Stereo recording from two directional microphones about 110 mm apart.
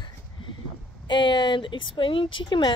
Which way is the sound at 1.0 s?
45° left (ahead or behind).